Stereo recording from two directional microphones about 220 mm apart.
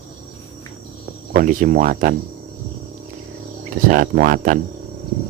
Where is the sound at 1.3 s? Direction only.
40° right (ahead or behind).